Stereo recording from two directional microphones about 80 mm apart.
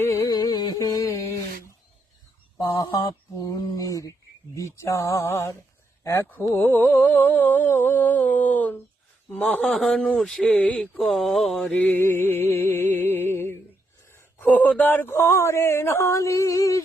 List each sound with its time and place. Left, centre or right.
0.2 s carnatic music: left
2.6 s speech: left
3.0 s a sound: left
4.5 s speech: left
6.5 s humming: left
9.3 s a man's voice: centre
10.6 s mantra: centre
11.7 s a man's voice: centre
12.0 s humming: left
14.4 s speech: centre; by 16.8 s left